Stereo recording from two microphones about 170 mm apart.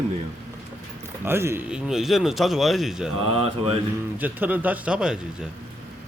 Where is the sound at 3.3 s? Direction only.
35° right (ahead or behind).